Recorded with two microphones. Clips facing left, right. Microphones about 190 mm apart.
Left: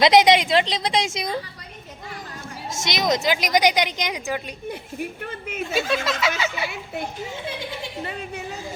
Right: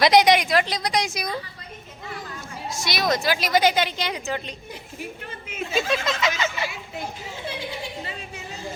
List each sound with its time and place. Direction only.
0.0 s a woman's voice: 20° left (ahead or behind)
2.8 s a woman's voice: 20° left (ahead or behind)
4.7 s a woman's voice: 60° left (ahead or behind)
5.7 s a woman's voice: 5° left (ahead or behind)